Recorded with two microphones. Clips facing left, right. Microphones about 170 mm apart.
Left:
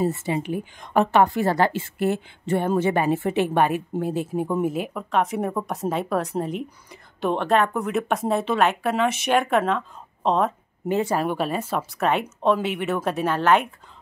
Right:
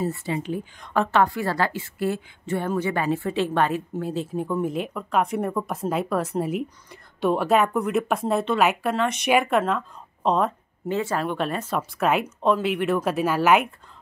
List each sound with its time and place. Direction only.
0.0 s a woman's voice: 20° left (ahead or behind)
4.6 s speech: 5° left (ahead or behind)
10.9 s speech: 15° left (ahead or behind); by 13.7 s 5° right (ahead or behind)